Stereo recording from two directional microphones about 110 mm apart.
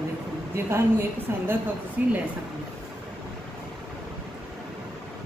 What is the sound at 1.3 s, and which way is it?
Speech, 20° right (ahead or behind).